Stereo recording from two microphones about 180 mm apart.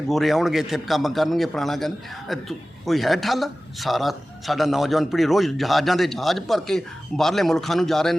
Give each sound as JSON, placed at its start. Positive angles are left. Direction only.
{"t": 0.1, "sound": "a man's voice", "side_deg": 0}